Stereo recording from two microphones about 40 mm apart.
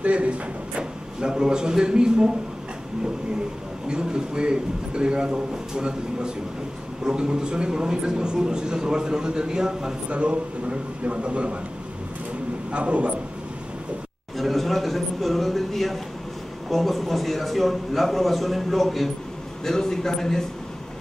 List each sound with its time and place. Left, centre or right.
0.0 s a man's voice: right
1.2 s a man's voice: centre
3.9 s a man's voice: right
10.0 s a man's voice: right
12.7 s a man's voice: right
14.3 s a man's voice: centre